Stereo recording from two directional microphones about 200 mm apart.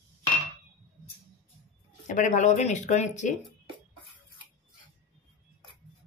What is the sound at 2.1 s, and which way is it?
Speech, 40° left (ahead or behind).